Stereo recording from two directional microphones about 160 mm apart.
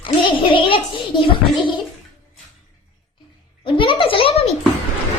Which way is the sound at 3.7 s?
30° left (ahead or behind).